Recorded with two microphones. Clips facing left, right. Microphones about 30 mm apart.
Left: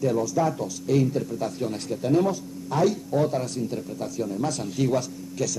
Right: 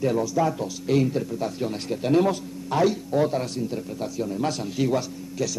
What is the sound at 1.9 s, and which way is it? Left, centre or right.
Speech, right.